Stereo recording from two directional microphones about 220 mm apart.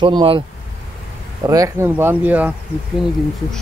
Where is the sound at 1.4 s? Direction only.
15° right (ahead or behind).